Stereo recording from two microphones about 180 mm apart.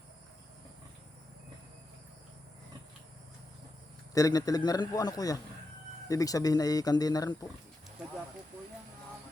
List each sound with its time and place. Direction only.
4.1 s a man's voice: 20° left (ahead or behind)